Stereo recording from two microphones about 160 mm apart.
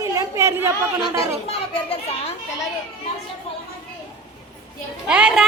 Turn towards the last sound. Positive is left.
turn(degrees=-5)  # may be behind; listen again after turning